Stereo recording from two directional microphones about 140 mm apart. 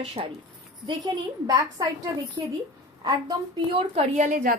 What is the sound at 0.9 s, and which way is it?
A woman's voice, 30° right (ahead or behind).